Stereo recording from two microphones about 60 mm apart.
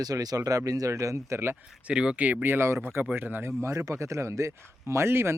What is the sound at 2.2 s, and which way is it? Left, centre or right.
A man's voice, right.